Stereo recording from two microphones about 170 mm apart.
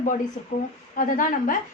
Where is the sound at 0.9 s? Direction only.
55° left (ahead or behind).